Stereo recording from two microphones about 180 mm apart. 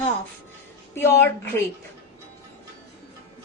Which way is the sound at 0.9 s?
10° left (ahead or behind).